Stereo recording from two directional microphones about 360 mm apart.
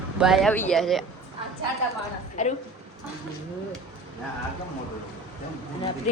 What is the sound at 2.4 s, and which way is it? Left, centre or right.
Speech, centre.